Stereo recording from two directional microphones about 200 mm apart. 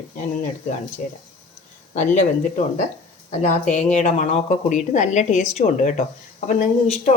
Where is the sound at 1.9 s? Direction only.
40° left (ahead or behind).